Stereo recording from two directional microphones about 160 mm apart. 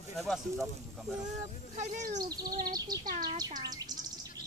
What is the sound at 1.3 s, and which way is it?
Speech, 45° right (ahead or behind).